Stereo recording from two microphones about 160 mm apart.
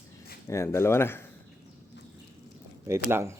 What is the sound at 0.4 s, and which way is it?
Speech, 20° left (ahead or behind).